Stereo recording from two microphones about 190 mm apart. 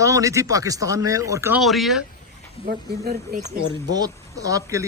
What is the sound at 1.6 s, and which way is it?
Speech, centre (ahead or behind).